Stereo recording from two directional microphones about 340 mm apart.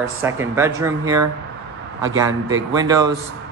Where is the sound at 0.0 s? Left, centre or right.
Centre.